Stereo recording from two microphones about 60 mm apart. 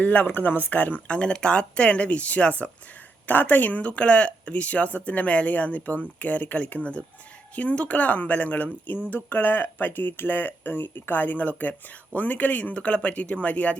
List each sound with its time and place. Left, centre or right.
0.0 s speech: left